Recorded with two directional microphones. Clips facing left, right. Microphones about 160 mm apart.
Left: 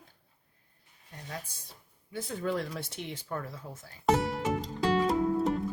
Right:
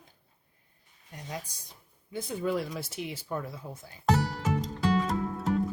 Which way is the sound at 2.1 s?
10° right (ahead or behind).